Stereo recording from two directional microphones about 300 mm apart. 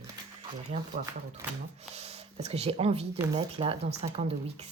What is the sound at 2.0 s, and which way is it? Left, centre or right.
A woman's voice, right.